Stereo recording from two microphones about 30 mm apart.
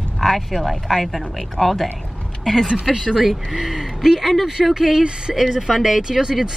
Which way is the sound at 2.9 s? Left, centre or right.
Centre.